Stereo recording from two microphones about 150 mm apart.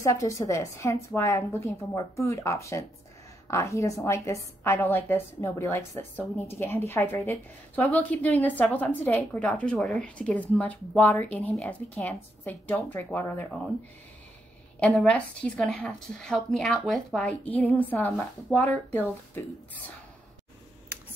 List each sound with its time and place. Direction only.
0.0 s a woman's voice: 20° left (ahead or behind)
14.8 s a woman's voice: 5° left (ahead or behind)